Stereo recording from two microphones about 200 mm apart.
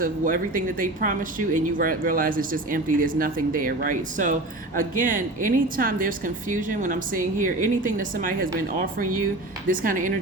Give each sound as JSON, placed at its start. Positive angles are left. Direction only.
{"t": 0.0, "sound": "speech", "side_deg": -45}
{"t": 9.6, "sound": "speech", "side_deg": -40}